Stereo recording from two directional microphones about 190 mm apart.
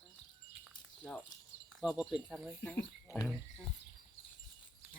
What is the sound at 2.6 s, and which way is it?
Speech, 10° left (ahead or behind).